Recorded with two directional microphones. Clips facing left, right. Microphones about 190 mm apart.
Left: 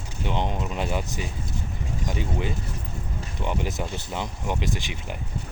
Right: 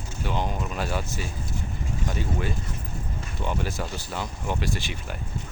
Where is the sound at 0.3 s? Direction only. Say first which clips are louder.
Left 1 dB; 20° left (ahead or behind).